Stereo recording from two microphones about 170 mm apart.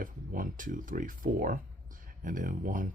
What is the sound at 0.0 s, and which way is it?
Speech, 50° right (ahead or behind).